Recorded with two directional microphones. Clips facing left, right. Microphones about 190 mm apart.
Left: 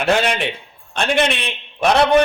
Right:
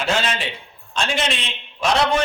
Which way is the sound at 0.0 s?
60° left (ahead or behind).